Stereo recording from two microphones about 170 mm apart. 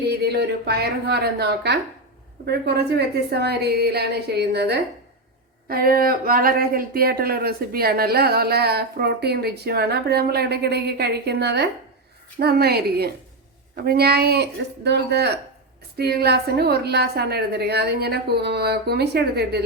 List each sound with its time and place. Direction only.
0.0 s speech: 75° right (ahead or behind)
5.6 s speech: 60° right (ahead or behind); by 11.7 s 75° right (ahead or behind)
12.4 s speech: 65° right (ahead or behind)